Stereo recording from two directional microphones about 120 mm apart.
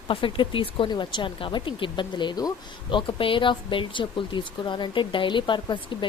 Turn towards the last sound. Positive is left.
turn(degrees=40)  # may be behind; listen again after turning